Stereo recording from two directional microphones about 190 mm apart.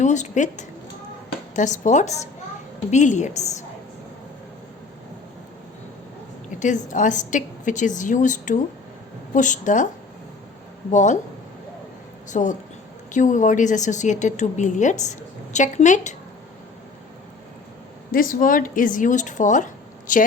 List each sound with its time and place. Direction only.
0.0 s a woman's voice: 40° left (ahead or behind)
6.6 s a woman's voice: 40° left (ahead or behind)
10.9 s a woman's voice: 40° left (ahead or behind)
12.3 s a woman's voice: 40° left (ahead or behind)
18.1 s speech: 45° left (ahead or behind)